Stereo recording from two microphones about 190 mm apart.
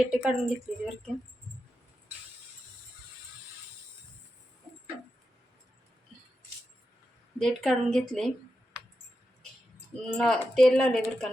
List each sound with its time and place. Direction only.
0.1 s speech: 5° right (ahead or behind)
7.3 s speech: centre (ahead or behind)
10.2 s speech: centre (ahead or behind)